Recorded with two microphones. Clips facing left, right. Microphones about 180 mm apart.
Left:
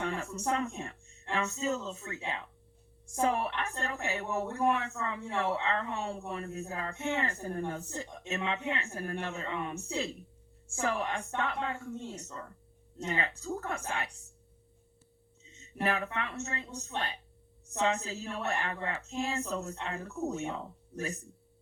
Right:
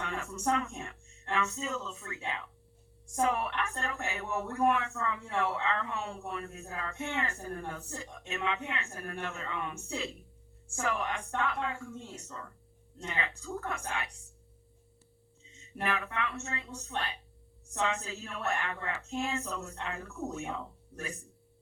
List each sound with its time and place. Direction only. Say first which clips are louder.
0.0 s a sound: left 3 dB; 35° left (ahead or behind)
0.5 s a woman's voice: left 1 dB; 35° left (ahead or behind)
13.1 s a woman's voice: left 3 dB; 40° left (ahead or behind)
15.6 s a woman's voice: left 3 dB; 40° left (ahead or behind)